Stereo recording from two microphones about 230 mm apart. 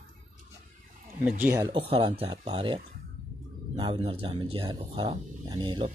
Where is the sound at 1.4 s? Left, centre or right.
Centre.